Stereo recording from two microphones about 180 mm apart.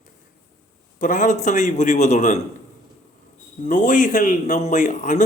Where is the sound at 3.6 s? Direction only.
45° left (ahead or behind).